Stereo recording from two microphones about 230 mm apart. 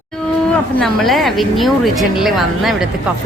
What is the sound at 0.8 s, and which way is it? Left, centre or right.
Speech, centre.